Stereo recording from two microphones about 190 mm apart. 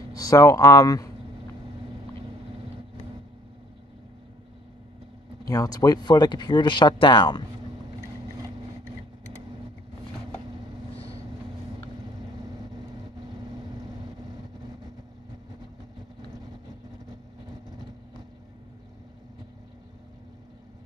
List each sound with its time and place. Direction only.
0.1 s speech: 20° left (ahead or behind)
5.5 s speech: 20° left (ahead or behind)